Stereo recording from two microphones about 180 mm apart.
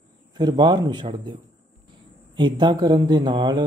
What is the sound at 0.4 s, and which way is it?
Speech, 25° right (ahead or behind).